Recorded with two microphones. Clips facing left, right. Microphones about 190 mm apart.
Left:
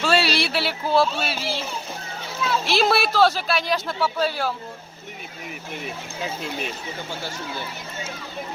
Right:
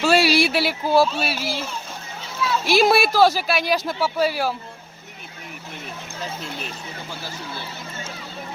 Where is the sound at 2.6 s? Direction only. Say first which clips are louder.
Right 5 dB; 10° right (ahead or behind).